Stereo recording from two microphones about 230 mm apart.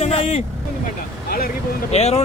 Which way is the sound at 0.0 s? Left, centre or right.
Left.